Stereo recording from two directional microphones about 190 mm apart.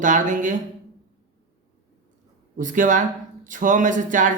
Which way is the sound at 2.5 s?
45° right (ahead or behind).